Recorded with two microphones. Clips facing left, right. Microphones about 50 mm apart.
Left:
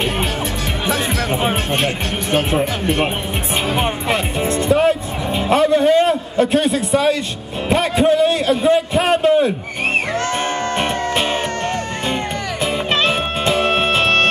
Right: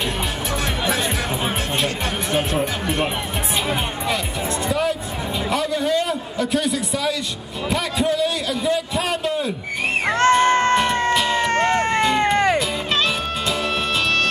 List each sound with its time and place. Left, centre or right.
4.6 s music: left
5.5 s a man's voice: left
10.5 s music: right
11.1 s music: left
11.5 s music: right
12.9 s music: left